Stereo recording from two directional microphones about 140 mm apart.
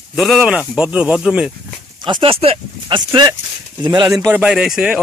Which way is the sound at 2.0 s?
35° right (ahead or behind).